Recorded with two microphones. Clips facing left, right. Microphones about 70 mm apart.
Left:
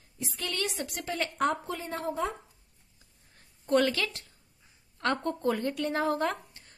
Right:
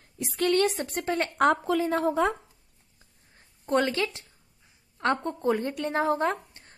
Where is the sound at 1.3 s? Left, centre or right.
Right.